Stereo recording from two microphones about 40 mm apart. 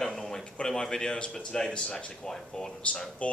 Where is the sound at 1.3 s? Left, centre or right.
Centre.